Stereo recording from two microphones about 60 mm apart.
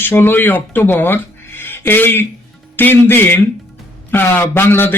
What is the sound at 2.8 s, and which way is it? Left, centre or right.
A man's voice, left.